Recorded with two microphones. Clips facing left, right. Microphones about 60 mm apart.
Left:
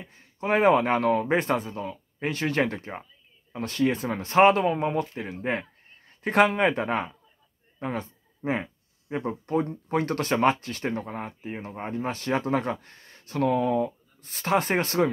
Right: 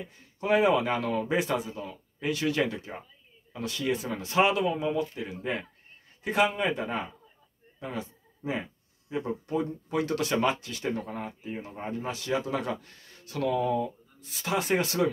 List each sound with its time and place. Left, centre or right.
0.0 s speech: left
6.2 s speech: left
8.4 s speech: left